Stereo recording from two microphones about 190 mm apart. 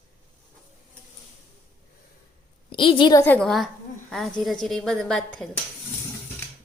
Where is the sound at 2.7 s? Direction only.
25° left (ahead or behind).